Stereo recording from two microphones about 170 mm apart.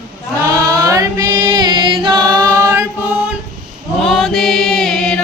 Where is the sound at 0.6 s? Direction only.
20° right (ahead or behind).